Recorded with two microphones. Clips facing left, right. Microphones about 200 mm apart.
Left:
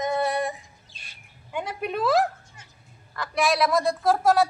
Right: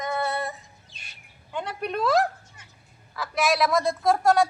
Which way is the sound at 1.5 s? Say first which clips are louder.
Left 1 dB; 5° left (ahead or behind).